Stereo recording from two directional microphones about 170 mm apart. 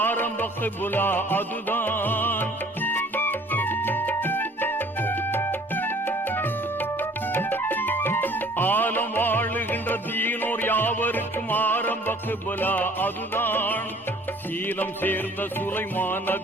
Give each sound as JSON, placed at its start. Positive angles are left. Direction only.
{"t": 0.0, "sound": "music", "side_deg": 10}